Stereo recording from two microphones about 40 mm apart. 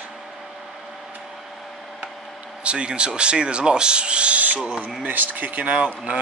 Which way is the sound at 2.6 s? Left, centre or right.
Right.